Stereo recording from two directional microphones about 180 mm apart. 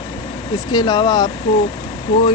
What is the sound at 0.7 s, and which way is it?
Speech, 25° left (ahead or behind).